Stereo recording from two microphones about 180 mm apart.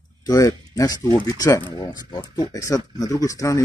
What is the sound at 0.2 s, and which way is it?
Speech, 20° left (ahead or behind).